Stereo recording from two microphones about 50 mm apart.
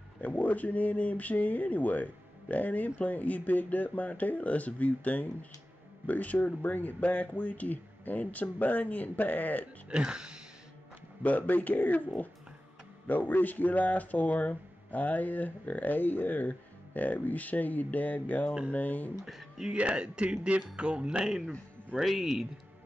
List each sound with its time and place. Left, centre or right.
0.2 s speech: left
9.8 s speech: centre
11.2 s speech: left
19.2 s speech: centre
19.7 s speech: right
21.2 s speech: centre